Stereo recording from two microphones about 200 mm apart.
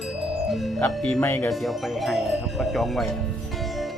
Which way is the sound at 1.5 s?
Centre (ahead or behind).